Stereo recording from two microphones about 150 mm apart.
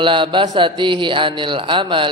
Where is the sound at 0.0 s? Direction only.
35° right (ahead or behind).